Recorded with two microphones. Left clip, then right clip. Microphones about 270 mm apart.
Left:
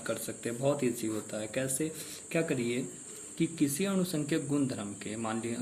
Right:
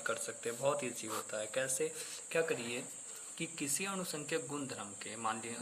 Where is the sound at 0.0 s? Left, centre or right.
Right.